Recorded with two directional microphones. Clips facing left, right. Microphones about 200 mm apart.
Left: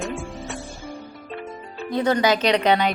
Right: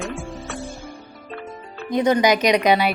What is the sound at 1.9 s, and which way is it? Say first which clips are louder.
Speech: right 2 dB; 15° right (ahead or behind).